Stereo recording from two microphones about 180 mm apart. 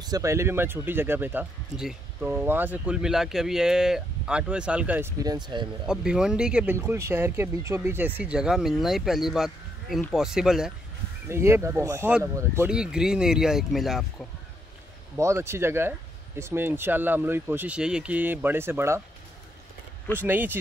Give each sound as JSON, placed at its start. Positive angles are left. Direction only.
{"t": 0.0, "sound": "speech", "side_deg": -20}
{"t": 5.2, "sound": "speech", "side_deg": -25}
{"t": 5.9, "sound": "speech", "side_deg": -5}
{"t": 11.2, "sound": "speech", "side_deg": -15}
{"t": 12.6, "sound": "speech", "side_deg": -5}
{"t": 15.1, "sound": "speech", "side_deg": -15}
{"t": 20.2, "sound": "speech", "side_deg": -10}